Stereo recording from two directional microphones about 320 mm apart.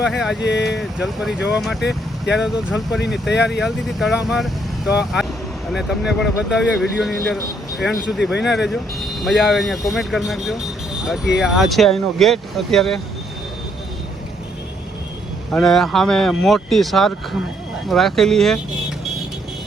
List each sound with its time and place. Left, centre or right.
0.0 s speech: centre
0.3 s speech: left
0.8 s speech: centre
15.5 s speech: centre